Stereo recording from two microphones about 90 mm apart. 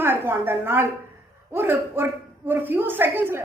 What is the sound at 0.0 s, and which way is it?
A woman's voice, 25° right (ahead or behind).